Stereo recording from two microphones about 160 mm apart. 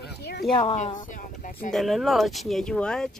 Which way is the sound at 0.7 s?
55° left (ahead or behind).